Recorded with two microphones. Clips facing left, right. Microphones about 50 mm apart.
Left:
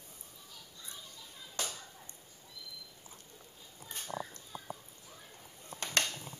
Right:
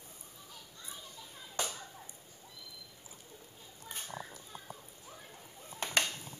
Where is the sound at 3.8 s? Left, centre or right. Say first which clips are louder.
Left 3 dB; centre.